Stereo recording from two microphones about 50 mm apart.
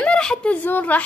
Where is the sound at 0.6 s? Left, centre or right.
Left.